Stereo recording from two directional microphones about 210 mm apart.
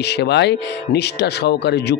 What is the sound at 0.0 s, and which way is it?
Speech, 50° left (ahead or behind).